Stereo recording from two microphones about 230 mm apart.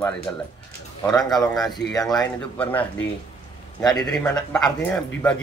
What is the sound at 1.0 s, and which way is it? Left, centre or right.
Speech, centre.